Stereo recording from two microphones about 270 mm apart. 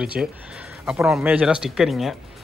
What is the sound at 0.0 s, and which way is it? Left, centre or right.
Speech, centre.